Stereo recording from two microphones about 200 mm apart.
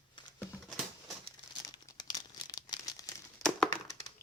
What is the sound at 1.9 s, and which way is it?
Crumpling, 20° left (ahead or behind).